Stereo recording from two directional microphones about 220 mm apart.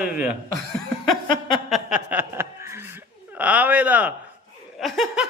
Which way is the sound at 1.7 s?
5° right (ahead or behind).